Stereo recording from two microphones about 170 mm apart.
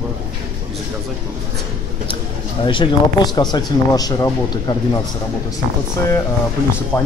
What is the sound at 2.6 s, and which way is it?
Speech, 30° left (ahead or behind).